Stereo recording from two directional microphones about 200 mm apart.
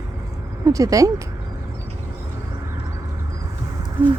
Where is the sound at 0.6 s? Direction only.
15° right (ahead or behind).